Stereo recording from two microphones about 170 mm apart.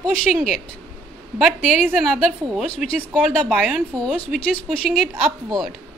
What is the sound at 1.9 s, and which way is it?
A woman's voice, centre (ahead or behind).